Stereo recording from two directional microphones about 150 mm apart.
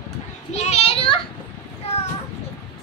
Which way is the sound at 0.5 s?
45° left (ahead or behind).